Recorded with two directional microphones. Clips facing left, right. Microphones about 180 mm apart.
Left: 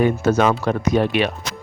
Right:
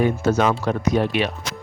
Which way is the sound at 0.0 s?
70° left (ahead or behind).